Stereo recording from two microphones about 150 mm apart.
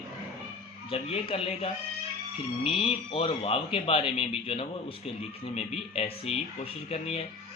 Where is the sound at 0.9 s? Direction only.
40° left (ahead or behind).